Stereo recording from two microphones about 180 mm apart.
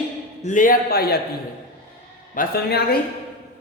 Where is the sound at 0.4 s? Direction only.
45° left (ahead or behind).